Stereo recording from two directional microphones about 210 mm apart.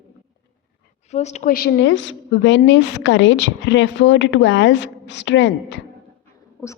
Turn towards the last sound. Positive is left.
turn(degrees=60)  # may be behind; listen again after turning